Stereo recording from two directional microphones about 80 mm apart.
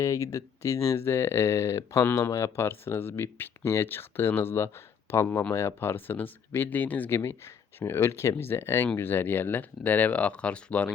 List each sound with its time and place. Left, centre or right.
0.0 s speech: left
2.0 s speech: left
7.2 s speech: left; by 10.9 s centre